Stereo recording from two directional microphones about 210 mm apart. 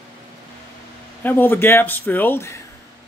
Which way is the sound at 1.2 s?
10° left (ahead or behind).